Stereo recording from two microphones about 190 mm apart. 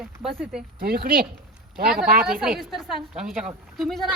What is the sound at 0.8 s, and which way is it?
Speech, 55° right (ahead or behind).